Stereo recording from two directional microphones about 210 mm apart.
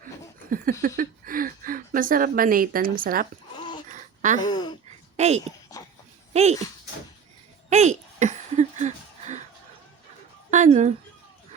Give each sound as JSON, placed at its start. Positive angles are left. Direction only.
{"t": 0.5, "sound": "speech", "side_deg": -45}
{"t": 3.9, "sound": "a sound", "side_deg": -35}
{"t": 4.4, "sound": "speech", "side_deg": 20}
{"t": 5.1, "sound": "speech", "side_deg": -30}
{"t": 7.7, "sound": "a sound", "side_deg": -35}
{"t": 10.5, "sound": "speech", "side_deg": -35}